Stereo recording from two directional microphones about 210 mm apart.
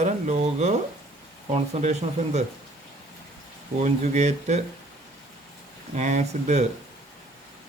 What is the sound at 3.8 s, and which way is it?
Speech, 35° right (ahead or behind).